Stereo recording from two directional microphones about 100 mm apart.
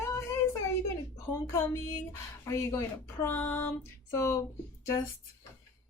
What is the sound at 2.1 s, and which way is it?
Speech, 30° left (ahead or behind).